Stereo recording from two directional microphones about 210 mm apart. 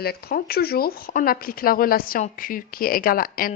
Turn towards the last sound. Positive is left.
turn(degrees=45)  # may be behind; listen again after turning